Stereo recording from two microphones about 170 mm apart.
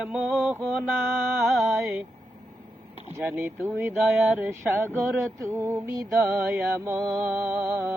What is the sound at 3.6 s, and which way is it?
Speech, 10° right (ahead or behind).